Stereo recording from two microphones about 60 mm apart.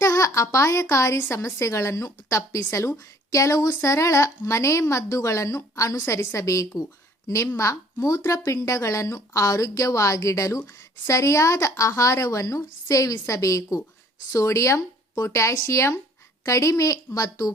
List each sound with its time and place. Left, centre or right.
0.0 s a woman's voice: left
3.3 s a woman's voice: left
8.2 s a woman's voice: left
14.3 s a woman's voice: left
16.5 s a woman's voice: left
17.2 s speech: left